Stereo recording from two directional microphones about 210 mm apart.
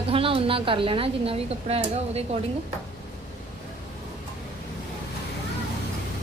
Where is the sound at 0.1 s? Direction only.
25° right (ahead or behind).